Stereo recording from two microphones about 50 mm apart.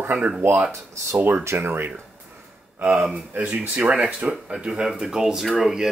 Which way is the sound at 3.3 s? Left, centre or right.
Right.